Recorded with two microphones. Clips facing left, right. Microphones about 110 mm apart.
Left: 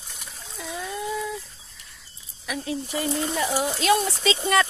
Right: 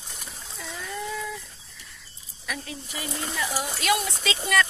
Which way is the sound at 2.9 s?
35° left (ahead or behind).